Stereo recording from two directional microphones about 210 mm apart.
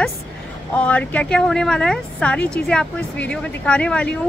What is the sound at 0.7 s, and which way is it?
Speech, 5° left (ahead or behind).